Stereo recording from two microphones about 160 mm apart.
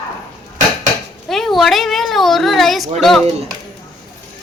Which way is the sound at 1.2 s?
Centre (ahead or behind).